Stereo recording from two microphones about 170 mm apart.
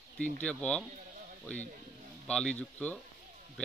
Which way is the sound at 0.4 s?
5° left (ahead or behind).